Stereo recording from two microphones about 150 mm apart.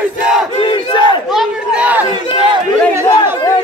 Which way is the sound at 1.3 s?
5° right (ahead or behind).